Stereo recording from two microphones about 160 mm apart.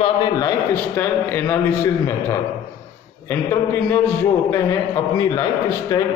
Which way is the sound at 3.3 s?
15° left (ahead or behind).